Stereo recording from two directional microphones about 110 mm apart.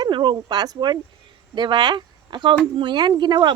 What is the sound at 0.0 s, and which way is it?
Speech, 45° right (ahead or behind).